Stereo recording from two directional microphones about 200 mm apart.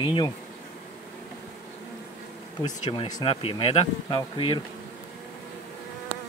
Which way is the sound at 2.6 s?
30° left (ahead or behind).